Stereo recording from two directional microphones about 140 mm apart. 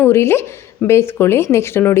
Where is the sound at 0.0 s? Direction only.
20° left (ahead or behind).